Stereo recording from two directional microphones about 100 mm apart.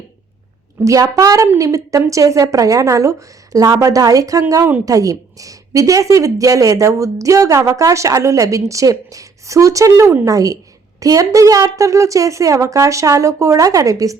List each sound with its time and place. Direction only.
0.9 s a woman's voice: 35° right (ahead or behind)